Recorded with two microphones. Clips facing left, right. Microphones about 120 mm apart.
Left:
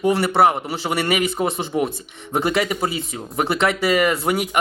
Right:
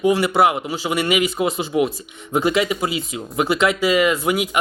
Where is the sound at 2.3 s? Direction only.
55° left (ahead or behind).